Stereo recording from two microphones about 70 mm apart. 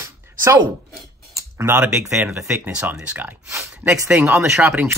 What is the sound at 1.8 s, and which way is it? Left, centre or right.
Speech, centre.